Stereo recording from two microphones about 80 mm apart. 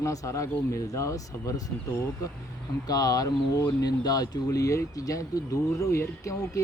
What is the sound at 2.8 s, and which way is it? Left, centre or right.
Speech, left.